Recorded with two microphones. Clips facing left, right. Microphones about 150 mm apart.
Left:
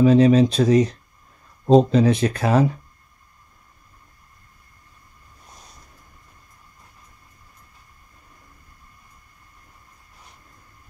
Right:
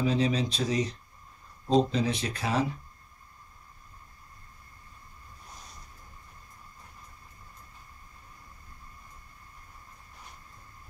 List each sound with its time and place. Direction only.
0.0 s speech: 55° left (ahead or behind)